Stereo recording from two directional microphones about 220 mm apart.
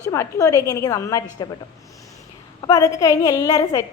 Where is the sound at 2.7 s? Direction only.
15° left (ahead or behind).